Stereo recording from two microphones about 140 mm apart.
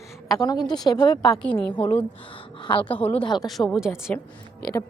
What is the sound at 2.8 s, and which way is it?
Speech, 10° left (ahead or behind).